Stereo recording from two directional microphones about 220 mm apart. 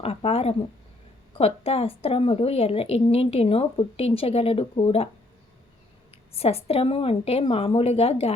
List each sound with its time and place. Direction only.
0.0 s a woman's voice: 25° left (ahead or behind)
6.3 s a woman's voice: 25° left (ahead or behind)